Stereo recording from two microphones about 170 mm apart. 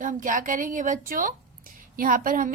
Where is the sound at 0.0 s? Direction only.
50° right (ahead or behind).